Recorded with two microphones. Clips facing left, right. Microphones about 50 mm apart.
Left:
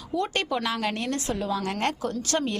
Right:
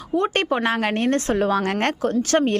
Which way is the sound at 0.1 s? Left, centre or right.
Right.